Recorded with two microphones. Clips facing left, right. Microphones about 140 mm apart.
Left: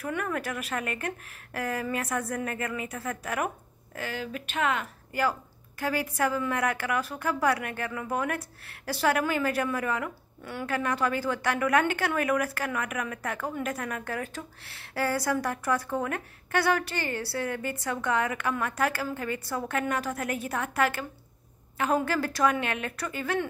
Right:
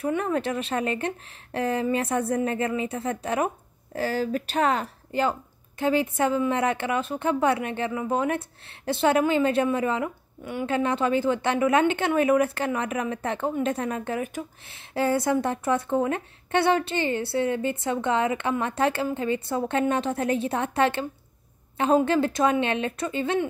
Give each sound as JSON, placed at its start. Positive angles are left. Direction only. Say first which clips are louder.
{"t": 0.0, "sound": "a woman's voice", "louder": "right 6 dB", "side_deg": -25}